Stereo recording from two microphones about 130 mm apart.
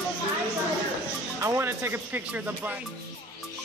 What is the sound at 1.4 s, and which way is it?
Music, 20° right (ahead or behind).